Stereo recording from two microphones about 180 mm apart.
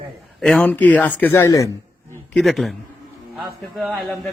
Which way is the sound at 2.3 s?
Centre (ahead or behind).